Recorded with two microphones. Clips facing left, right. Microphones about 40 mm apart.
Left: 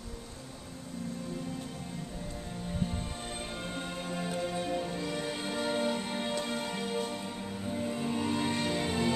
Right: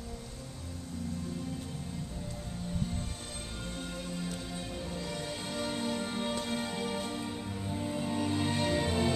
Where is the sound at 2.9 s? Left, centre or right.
Left.